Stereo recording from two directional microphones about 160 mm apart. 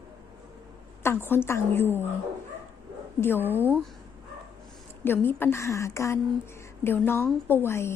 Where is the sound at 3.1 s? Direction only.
15° left (ahead or behind).